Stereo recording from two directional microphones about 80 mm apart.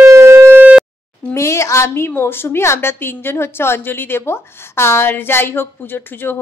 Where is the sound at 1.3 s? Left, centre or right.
Left.